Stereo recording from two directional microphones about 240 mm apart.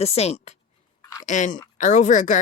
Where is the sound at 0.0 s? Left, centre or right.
Left.